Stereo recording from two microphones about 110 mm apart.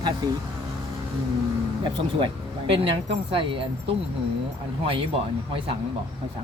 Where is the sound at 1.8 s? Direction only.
50° right (ahead or behind).